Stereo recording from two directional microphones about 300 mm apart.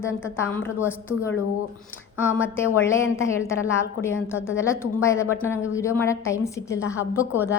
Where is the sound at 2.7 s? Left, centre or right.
Centre.